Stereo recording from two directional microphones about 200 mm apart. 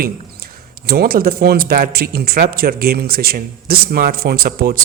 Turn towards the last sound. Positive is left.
turn(degrees=-50)  # may be behind; listen again after turning